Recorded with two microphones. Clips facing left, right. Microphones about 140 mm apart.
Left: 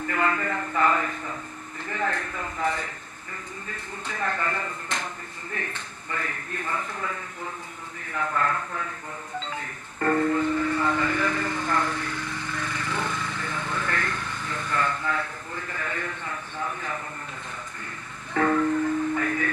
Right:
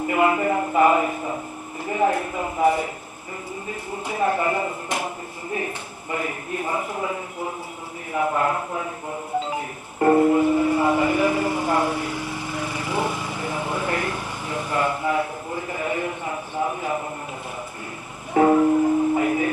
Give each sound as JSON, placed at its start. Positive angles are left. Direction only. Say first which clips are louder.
{"t": 0.1, "sound": "a man's voice", "louder": "right 7 dB", "side_deg": -15}
{"t": 9.4, "sound": "music", "louder": "right 7 dB", "side_deg": -15}
{"t": 18.3, "sound": "music", "louder": "right 6 dB", "side_deg": -25}
{"t": 19.2, "sound": "music", "louder": "right 6 dB", "side_deg": -15}